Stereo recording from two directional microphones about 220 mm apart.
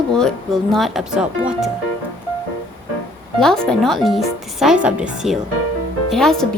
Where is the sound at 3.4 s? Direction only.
5° left (ahead or behind).